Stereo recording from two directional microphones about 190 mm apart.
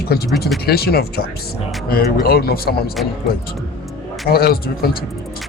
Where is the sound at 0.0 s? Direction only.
55° left (ahead or behind).